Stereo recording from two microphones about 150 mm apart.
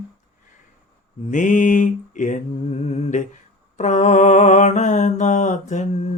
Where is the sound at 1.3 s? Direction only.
55° left (ahead or behind).